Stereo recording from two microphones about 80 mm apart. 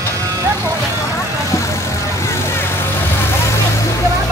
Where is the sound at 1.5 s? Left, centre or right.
Left.